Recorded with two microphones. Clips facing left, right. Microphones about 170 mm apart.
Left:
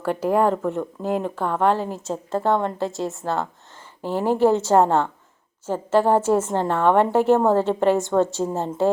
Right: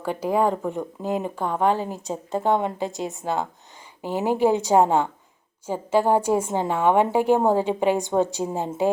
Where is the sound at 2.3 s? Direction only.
15° right (ahead or behind).